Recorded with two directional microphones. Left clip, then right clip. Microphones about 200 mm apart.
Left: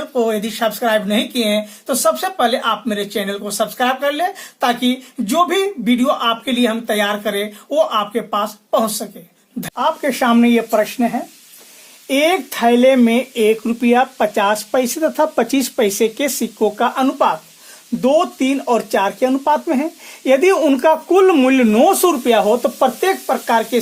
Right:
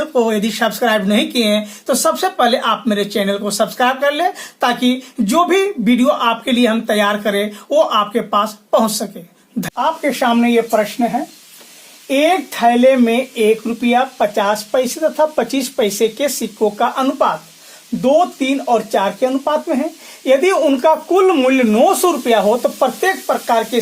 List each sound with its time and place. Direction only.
0.1 s speech: 5° right (ahead or behind)
9.7 s speech: 50° left (ahead or behind)